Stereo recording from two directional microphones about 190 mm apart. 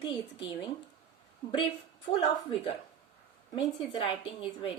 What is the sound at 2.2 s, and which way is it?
A woman's voice, 30° left (ahead or behind).